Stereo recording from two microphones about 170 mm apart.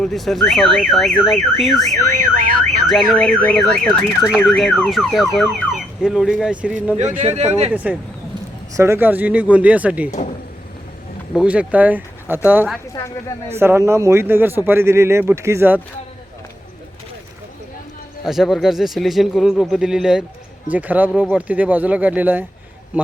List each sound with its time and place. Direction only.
0.0 s a man's voice: centre (ahead or behind)
2.1 s car alarm: 55° right (ahead or behind)
2.8 s a man's voice: centre (ahead or behind)
7.2 s speech: 40° right (ahead or behind)
7.7 s speech: 5° right (ahead or behind)
11.3 s speech: 5° right (ahead or behind)
18.3 s a man's voice: centre (ahead or behind)